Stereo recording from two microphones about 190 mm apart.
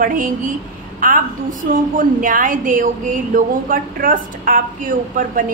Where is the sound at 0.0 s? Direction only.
45° right (ahead or behind).